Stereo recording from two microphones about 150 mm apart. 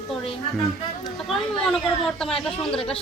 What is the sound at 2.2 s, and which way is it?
Speech, 5° left (ahead or behind).